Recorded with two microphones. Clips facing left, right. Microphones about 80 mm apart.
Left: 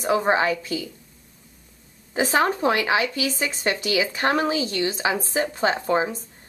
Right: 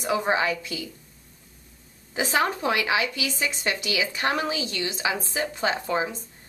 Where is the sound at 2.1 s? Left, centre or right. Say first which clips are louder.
Left 3 dB; left.